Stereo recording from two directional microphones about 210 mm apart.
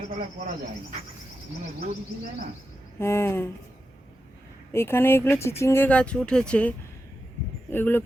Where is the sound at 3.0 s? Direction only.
10° left (ahead or behind).